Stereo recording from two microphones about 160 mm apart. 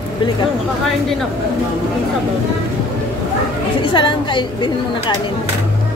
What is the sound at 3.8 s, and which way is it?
Speech, 30° left (ahead or behind).